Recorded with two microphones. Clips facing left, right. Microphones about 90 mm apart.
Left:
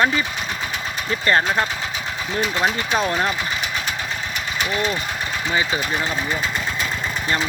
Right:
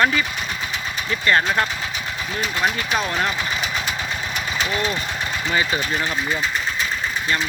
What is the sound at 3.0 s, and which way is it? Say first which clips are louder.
Speech: left 2 dB; 20° left (ahead or behind).